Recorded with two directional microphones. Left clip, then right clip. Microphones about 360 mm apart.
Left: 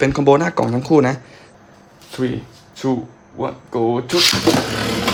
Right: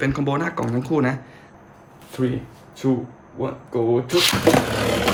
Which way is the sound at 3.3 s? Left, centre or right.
Centre.